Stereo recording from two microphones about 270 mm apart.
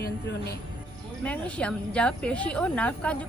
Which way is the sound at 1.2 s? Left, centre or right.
Centre.